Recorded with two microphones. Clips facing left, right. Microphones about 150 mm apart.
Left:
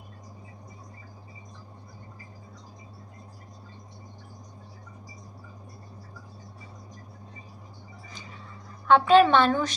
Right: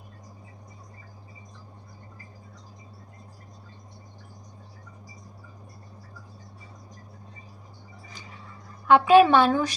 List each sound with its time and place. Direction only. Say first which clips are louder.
8.9 s a woman's voice: right 2 dB; 10° right (ahead or behind)